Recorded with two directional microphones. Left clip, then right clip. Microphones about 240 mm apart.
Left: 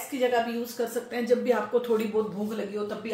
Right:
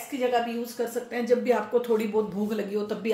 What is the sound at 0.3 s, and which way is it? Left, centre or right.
Speech, centre.